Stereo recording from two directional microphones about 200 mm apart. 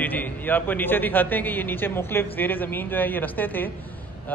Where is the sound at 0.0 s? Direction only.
10° left (ahead or behind).